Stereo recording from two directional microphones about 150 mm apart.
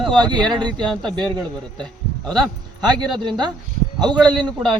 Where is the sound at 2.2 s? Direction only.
5° left (ahead or behind).